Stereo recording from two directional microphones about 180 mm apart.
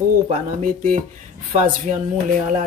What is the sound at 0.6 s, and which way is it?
Speech, 45° right (ahead or behind).